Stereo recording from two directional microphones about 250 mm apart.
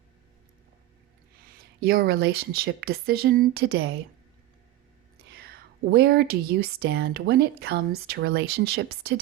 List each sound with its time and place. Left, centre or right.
1.5 s speech: right
5.3 s speech: right